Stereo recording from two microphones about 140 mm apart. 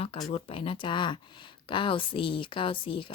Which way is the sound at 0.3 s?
40° left (ahead or behind).